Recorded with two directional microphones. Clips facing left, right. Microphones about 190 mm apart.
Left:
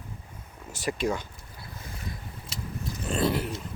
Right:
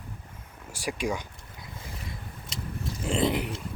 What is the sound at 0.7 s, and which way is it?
Speech, 10° right (ahead or behind).